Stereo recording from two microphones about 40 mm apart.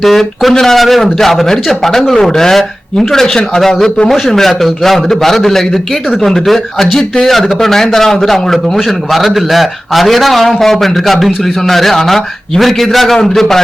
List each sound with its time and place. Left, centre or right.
0.0 s a man's voice: centre; by 4.1 s left
4.3 s a man's voice: centre